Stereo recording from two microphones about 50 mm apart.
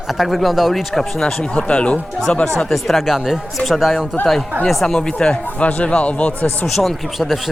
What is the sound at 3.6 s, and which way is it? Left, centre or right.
Speech, centre.